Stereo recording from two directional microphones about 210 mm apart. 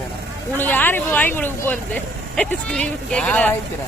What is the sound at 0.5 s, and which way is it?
Speech, 10° left (ahead or behind).